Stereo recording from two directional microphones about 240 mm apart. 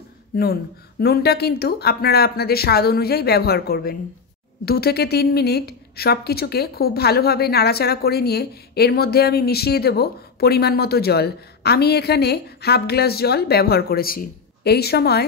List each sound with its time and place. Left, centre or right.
0.4 s a woman's voice: left